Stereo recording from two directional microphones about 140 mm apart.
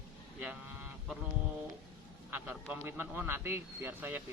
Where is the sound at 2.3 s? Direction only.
15° right (ahead or behind).